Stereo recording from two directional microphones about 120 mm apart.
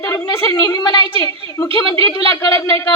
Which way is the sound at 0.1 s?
35° left (ahead or behind).